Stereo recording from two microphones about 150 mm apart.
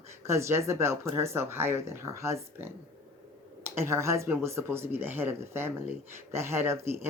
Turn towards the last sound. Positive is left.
turn(degrees=-15)  # may be behind; listen again after turning